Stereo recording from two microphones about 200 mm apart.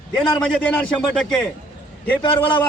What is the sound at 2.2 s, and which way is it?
Speech, 25° left (ahead or behind).